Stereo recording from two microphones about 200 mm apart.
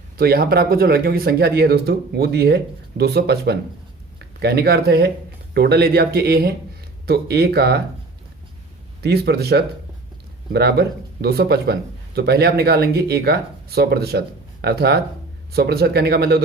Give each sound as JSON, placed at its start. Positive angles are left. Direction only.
{"t": 0.2, "sound": "a man's voice", "side_deg": -50}
{"t": 9.0, "sound": "a man's voice", "side_deg": -55}